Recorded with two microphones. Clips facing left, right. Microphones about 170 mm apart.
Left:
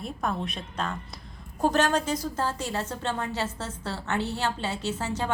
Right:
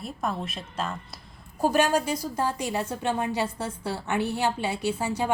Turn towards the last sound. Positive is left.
turn(degrees=-10)  # may be behind; listen again after turning